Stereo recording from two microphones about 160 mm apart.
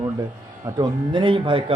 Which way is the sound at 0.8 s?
30° right (ahead or behind).